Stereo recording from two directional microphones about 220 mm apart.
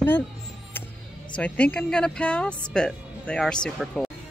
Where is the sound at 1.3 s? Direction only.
5° left (ahead or behind).